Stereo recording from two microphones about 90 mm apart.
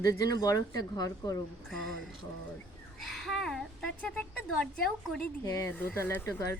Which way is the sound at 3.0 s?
Centre (ahead or behind).